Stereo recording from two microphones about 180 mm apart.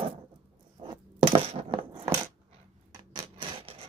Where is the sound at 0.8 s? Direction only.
30° right (ahead or behind).